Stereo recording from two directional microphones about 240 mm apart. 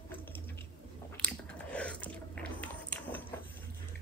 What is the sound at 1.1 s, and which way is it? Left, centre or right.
Biting, centre.